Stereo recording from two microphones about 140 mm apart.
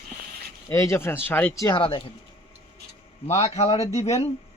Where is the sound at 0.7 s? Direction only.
20° left (ahead or behind).